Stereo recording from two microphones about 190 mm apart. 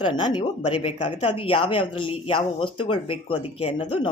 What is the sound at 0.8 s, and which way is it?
Speech, 30° left (ahead or behind).